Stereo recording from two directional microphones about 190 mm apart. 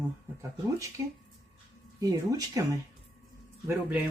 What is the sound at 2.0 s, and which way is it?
Speech, 20° right (ahead or behind).